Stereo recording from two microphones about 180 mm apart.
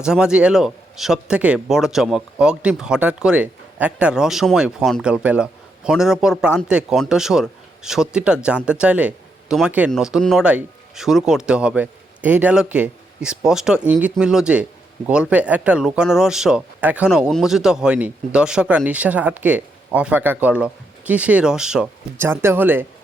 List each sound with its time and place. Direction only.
0.0 s a man's voice: 5° right (ahead or behind)